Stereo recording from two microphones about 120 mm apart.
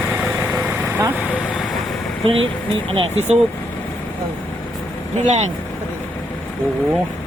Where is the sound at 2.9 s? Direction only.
55° right (ahead or behind).